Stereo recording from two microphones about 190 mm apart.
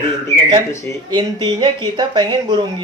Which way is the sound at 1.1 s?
25° right (ahead or behind).